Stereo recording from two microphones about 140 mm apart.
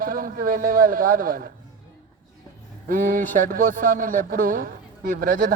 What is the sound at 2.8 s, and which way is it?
A man's voice, 80° right.